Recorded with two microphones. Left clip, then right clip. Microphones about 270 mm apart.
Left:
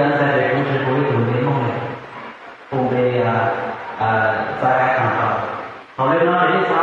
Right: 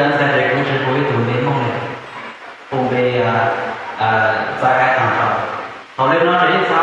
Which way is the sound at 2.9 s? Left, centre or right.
Centre.